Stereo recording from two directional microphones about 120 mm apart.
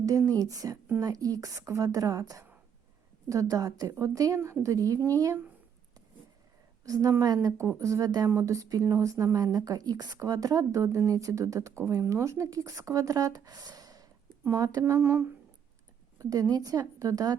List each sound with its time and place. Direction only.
0.0 s a woman's voice: 25° right (ahead or behind)
6.8 s a woman's voice: 30° right (ahead or behind)
16.1 s a woman's voice: 30° right (ahead or behind)